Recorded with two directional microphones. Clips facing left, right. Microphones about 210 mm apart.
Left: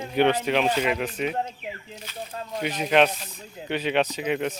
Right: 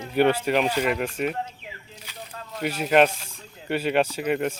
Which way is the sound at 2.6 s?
5° right (ahead or behind).